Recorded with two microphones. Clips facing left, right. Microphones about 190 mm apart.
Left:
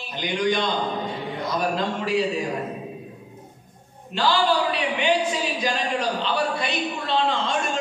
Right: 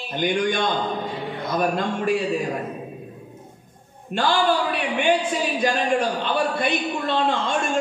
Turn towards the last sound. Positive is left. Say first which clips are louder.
# right 1 dB
turn(degrees=-55)  # may be behind; listen again after turning